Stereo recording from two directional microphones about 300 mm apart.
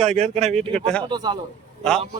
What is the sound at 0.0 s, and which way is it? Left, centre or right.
A man's voice, right.